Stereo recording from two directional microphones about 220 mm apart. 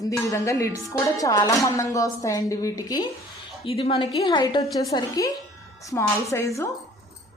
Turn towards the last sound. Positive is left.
turn(degrees=10)  # may be behind; listen again after turning